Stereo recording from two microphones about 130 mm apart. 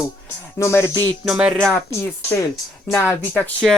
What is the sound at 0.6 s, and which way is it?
Speech, 20° left (ahead or behind).